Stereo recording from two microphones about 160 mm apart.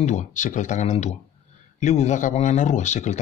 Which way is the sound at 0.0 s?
50° left (ahead or behind).